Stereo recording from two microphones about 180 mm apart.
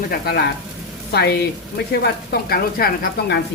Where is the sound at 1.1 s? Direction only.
65° left (ahead or behind).